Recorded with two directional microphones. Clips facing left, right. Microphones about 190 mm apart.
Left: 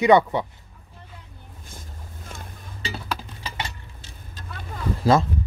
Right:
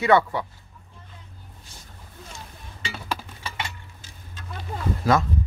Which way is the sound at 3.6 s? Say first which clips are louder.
Left 2 dB; 35° left (ahead or behind).